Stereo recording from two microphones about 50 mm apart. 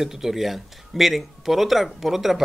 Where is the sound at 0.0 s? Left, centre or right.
Centre.